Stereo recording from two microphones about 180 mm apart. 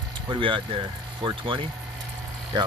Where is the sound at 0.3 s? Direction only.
25° right (ahead or behind).